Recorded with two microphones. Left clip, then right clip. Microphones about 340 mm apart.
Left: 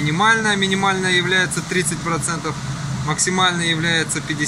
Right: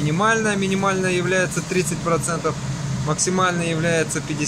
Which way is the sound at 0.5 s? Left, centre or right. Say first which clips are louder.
Left 4 dB; right.